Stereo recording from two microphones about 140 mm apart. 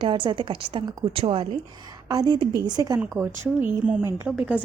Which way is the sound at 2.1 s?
30° right (ahead or behind).